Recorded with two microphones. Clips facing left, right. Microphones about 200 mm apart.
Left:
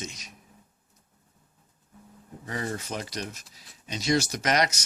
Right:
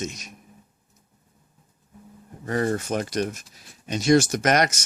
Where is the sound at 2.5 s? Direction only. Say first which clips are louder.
Right 9 dB; 50° right (ahead or behind).